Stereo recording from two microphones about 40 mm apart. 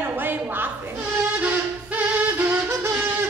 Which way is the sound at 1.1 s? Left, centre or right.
Right.